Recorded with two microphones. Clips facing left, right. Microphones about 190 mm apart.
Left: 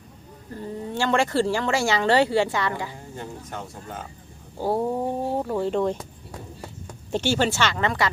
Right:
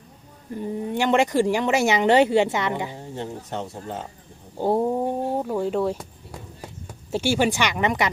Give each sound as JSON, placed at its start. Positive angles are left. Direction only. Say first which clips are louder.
{"t": 0.5, "sound": "speech", "louder": "right 4 dB", "side_deg": -15}
{"t": 5.4, "sound": "speech", "louder": "left 2 dB", "side_deg": -5}
{"t": 7.1, "sound": "speech", "louder": "right 1 dB", "side_deg": -10}